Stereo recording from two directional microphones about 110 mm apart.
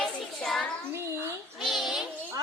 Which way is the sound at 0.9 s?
25° right (ahead or behind).